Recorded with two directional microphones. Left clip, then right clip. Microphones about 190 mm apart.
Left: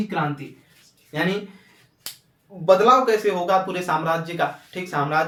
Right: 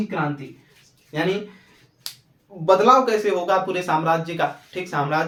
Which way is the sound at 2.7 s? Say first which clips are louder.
Even; 20° right (ahead or behind).